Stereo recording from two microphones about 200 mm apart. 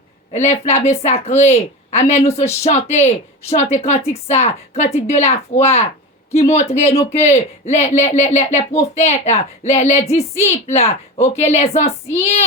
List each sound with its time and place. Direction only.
0.3 s speech: 35° left (ahead or behind)